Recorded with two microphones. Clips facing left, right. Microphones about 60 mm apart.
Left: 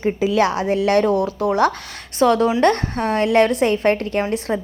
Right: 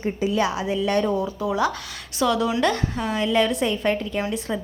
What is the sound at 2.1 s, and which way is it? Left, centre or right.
A woman's voice, left.